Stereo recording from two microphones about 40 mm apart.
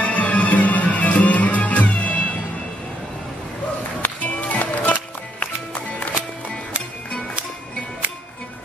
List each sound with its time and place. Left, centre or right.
0.0 s music: left
4.0 s music: left